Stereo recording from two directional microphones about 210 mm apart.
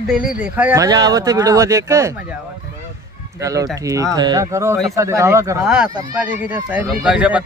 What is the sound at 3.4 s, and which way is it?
Speech, 15° right (ahead or behind).